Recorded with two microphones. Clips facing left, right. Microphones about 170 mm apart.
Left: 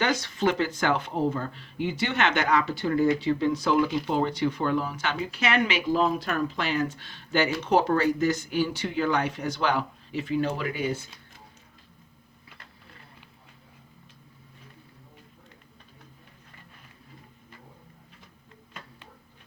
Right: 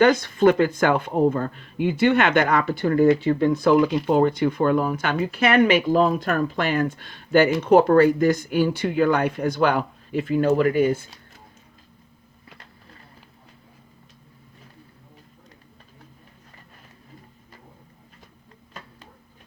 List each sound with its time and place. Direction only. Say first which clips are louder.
0.0 s speech: right 9 dB; 50° right (ahead or behind)